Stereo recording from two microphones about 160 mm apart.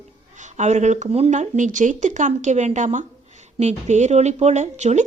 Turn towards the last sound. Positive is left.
turn(degrees=-45)  # may be behind; listen again after turning